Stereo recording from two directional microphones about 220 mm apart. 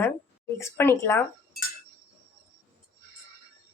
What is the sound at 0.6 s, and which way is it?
Speech, 10° left (ahead or behind).